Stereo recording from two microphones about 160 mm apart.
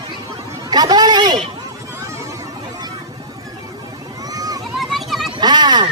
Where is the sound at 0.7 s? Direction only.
25° right (ahead or behind).